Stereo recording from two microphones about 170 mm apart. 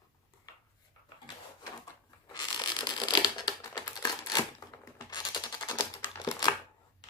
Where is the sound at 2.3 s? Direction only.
25° left (ahead or behind).